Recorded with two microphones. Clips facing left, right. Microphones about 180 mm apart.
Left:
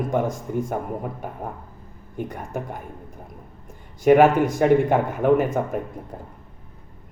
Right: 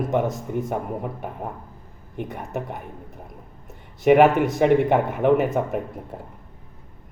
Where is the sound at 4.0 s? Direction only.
5° right (ahead or behind).